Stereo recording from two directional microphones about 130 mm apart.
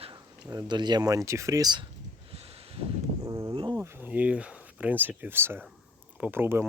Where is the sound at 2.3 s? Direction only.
50° right (ahead or behind).